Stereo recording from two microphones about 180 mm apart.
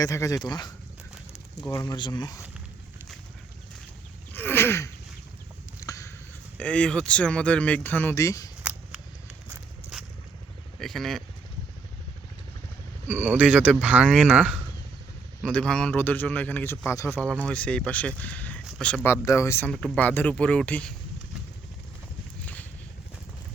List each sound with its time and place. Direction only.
0.0 s speech: 20° left (ahead or behind)
4.3 s a sound: 10° left (ahead or behind)
6.6 s speech: 5° left (ahead or behind)
10.8 s speech: centre (ahead or behind)
13.1 s speech: 10° right (ahead or behind)
15.4 s speech: 5° left (ahead or behind)